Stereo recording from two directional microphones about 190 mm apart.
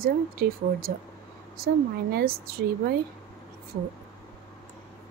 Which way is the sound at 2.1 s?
50° right (ahead or behind).